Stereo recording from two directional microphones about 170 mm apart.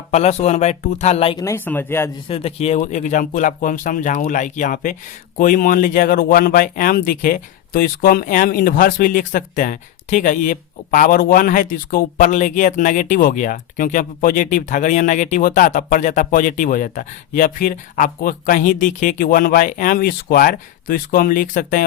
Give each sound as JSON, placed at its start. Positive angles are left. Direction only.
{"t": 0.1, "sound": "speech", "side_deg": 40}
{"t": 1.4, "sound": "speech", "side_deg": 15}
{"t": 2.2, "sound": "speech", "side_deg": 35}